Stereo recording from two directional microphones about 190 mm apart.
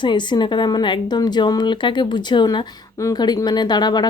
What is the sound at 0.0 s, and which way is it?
A woman's voice, 25° left (ahead or behind).